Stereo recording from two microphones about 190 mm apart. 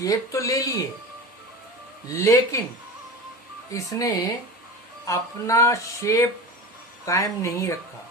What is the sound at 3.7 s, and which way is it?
Speech, 15° left (ahead or behind).